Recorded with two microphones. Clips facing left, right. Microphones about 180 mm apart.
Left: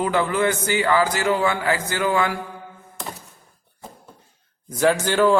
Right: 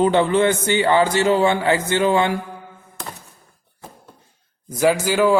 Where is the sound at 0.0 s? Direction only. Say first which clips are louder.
Right 5 dB; 25° right (ahead or behind).